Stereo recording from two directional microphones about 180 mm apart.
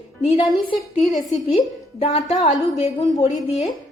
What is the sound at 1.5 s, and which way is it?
A woman's voice, 35° left (ahead or behind).